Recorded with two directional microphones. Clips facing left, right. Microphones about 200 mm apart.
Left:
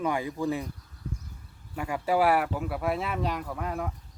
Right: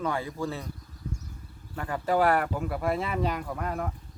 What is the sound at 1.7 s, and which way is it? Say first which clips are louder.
Speech: even; 10° left (ahead or behind).